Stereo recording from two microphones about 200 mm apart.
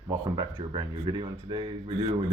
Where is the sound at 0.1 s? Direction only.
20° right (ahead or behind).